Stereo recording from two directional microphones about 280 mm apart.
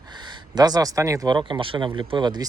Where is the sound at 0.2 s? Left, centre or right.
Centre.